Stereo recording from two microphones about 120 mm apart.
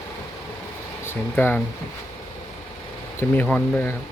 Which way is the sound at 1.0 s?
20° left (ahead or behind).